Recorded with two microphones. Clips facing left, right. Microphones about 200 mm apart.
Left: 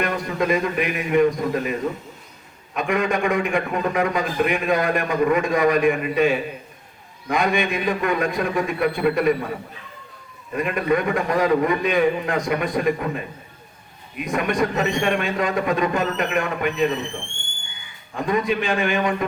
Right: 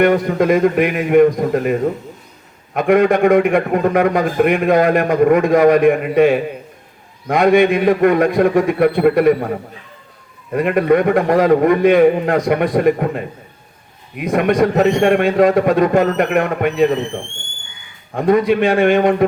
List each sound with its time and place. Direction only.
0.0 s a man's voice: 60° right (ahead or behind)
18.1 s a man's voice: 55° right (ahead or behind)